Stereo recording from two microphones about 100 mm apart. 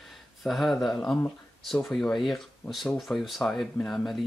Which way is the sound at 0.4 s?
Centre (ahead or behind).